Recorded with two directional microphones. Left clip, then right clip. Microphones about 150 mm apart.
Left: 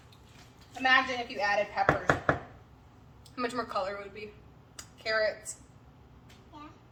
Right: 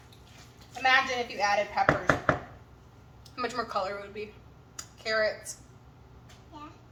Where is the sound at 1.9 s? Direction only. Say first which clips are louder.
Right 1 dB; 10° left (ahead or behind).